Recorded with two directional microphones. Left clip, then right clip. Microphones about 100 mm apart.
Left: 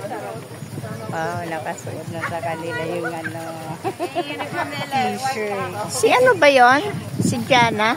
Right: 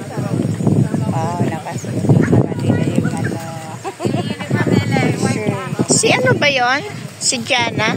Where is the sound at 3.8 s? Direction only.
20° left (ahead or behind).